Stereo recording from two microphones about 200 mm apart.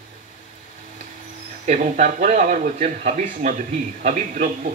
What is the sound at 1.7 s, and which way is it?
Speech, 40° right (ahead or behind).